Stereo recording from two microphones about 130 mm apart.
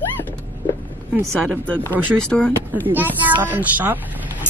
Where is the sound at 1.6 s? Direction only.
10° left (ahead or behind).